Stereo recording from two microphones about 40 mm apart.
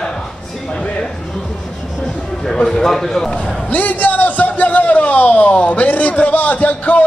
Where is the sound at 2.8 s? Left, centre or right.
Centre.